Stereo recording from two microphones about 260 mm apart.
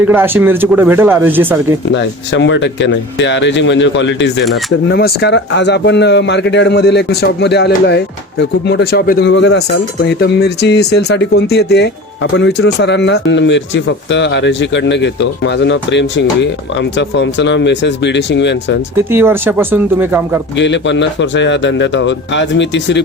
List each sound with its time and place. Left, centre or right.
0.0 s speech: centre
1.9 s a man's voice: left
19.1 s speech: centre
20.6 s speech: left